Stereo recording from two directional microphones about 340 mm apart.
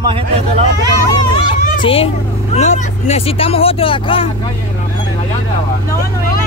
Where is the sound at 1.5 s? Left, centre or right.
Centre.